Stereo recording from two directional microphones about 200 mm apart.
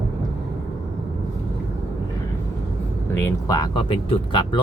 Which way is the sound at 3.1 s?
15° left (ahead or behind).